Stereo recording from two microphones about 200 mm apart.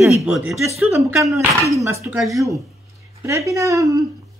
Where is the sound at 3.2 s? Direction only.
15° right (ahead or behind).